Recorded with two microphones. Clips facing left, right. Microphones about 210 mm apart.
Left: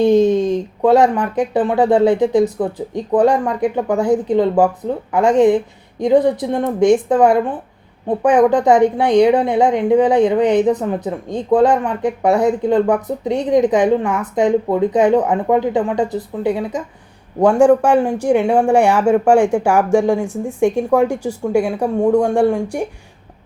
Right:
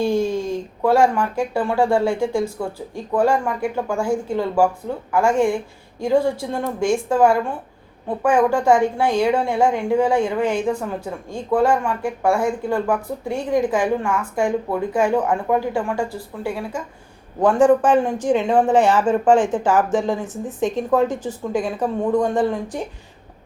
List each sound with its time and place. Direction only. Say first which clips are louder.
0.0 s a woman's voice: left 8 dB; 20° left (ahead or behind)